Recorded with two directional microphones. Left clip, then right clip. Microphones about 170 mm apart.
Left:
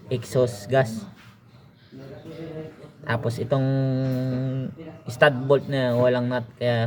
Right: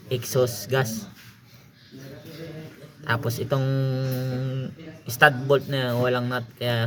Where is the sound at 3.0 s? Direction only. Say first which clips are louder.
Even; 30° right (ahead or behind).